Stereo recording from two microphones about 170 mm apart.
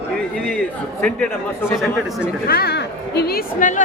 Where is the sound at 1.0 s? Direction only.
10° left (ahead or behind).